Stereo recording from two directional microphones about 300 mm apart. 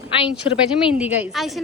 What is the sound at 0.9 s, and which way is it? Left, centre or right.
Speech, centre.